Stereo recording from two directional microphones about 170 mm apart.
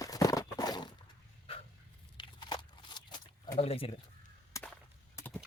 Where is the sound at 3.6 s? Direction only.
35° left (ahead or behind).